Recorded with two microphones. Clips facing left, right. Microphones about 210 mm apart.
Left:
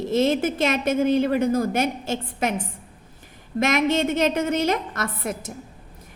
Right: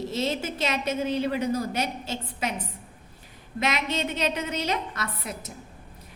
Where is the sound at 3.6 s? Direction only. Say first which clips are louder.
Left 7 dB; 45° left (ahead or behind).